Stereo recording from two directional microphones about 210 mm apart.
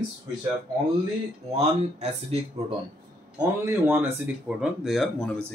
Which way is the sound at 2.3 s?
30° right (ahead or behind).